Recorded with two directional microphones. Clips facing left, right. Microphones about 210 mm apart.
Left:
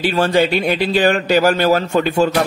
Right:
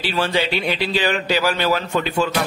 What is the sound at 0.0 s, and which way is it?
Speech, 45° left (ahead or behind).